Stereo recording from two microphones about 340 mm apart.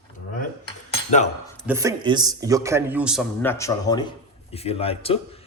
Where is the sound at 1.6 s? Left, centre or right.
Centre.